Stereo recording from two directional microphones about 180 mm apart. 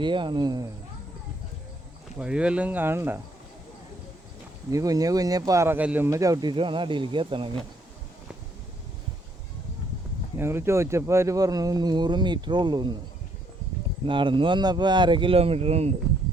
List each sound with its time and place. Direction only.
0.0 s speech: 25° right (ahead or behind)
2.1 s speech: 5° right (ahead or behind)
4.7 s speech: 20° right (ahead or behind)
10.3 s speech: 15° right (ahead or behind)
14.1 s speech: 30° right (ahead or behind)